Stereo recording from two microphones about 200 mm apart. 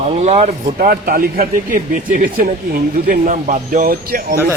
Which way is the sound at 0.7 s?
45° right (ahead or behind).